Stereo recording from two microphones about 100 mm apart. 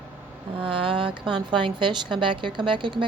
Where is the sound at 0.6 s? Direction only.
60° right (ahead or behind).